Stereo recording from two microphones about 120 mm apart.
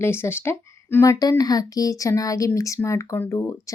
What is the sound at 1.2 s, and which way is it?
Speech, 30° left (ahead or behind).